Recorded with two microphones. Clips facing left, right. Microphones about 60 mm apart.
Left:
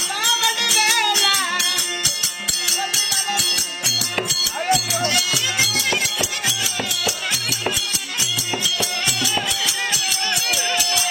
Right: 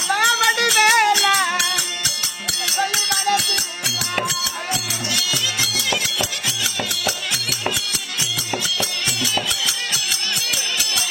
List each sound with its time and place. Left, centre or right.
0.1 s music: right
4.7 s music: left
8.6 s music: right